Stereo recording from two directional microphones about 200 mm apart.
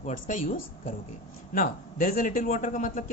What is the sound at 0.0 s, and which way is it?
A man's voice, 40° left (ahead or behind).